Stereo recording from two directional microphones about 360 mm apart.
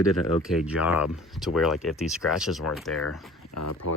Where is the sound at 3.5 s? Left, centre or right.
Left.